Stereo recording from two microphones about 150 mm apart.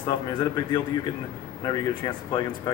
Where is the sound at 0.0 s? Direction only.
30° left (ahead or behind).